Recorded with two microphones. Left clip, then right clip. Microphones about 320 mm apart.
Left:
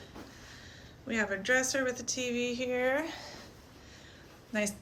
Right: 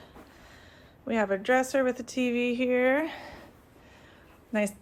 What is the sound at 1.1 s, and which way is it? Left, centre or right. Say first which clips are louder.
A woman's voice: right 4 dB; centre.